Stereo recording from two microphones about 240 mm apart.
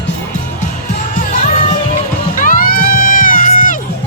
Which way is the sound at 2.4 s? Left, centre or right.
Left.